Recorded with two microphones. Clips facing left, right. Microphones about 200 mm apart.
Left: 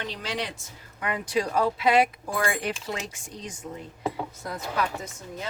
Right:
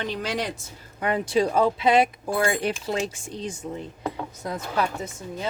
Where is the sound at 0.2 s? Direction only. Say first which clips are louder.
Right 4 dB; 45° right (ahead or behind); by 3.5 s 30° right (ahead or behind).